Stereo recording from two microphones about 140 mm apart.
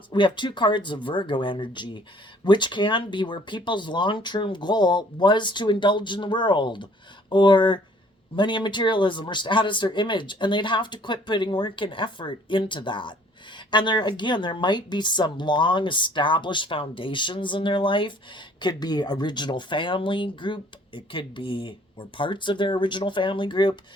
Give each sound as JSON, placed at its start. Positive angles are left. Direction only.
{"t": 0.1, "sound": "a woman's voice", "side_deg": 35}